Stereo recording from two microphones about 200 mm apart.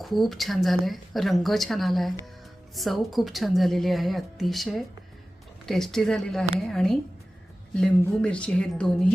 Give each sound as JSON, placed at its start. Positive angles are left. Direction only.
{"t": 0.0, "sound": "a woman's voice", "side_deg": 0}